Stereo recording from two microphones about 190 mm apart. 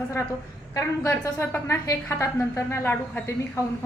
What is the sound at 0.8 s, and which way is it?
A woman's voice, 15° left (ahead or behind).